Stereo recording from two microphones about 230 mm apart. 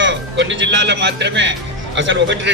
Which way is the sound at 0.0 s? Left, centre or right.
Right.